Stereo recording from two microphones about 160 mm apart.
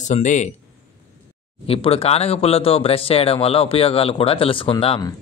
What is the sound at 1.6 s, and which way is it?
Speech, 35° left (ahead or behind).